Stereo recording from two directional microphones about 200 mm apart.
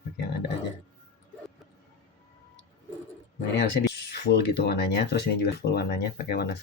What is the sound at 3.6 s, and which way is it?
Speech, 55° left (ahead or behind).